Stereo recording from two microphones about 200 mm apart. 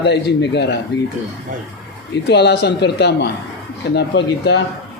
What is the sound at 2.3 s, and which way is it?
Speech, 55° left (ahead or behind).